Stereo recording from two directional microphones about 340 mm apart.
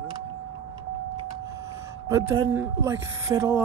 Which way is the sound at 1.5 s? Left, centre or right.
Centre.